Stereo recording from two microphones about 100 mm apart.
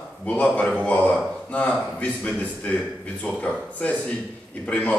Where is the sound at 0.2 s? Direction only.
15° left (ahead or behind).